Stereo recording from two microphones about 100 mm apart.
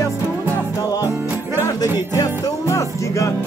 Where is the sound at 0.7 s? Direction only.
35° left (ahead or behind).